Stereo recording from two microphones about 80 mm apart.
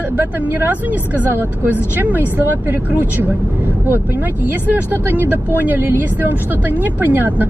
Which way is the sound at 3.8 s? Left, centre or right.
Right.